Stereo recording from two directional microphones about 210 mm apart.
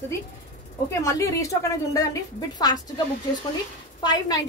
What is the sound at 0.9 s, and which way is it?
A woman's voice, 15° left (ahead or behind).